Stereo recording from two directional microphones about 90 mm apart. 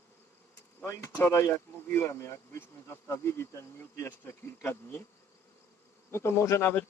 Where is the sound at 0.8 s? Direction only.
30° left (ahead or behind).